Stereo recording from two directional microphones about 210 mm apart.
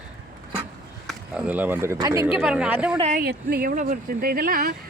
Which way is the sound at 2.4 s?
5° right (ahead or behind).